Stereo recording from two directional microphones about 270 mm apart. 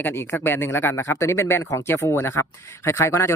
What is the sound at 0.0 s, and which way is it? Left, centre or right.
Speech, centre.